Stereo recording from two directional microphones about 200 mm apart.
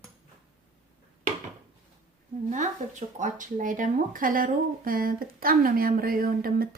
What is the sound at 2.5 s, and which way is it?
Speech, 35° right (ahead or behind).